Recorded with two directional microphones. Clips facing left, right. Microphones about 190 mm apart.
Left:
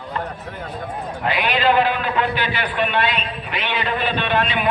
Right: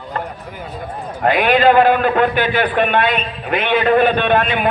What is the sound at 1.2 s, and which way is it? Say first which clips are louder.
A man's voice: right 7 dB; 50° right (ahead or behind).